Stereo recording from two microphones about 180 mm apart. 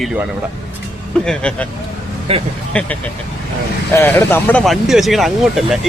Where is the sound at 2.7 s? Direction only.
5° left (ahead or behind).